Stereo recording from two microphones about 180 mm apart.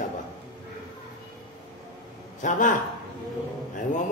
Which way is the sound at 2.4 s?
45° left (ahead or behind).